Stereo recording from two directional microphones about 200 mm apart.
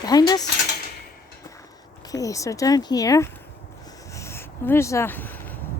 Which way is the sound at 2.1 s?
15° left (ahead or behind).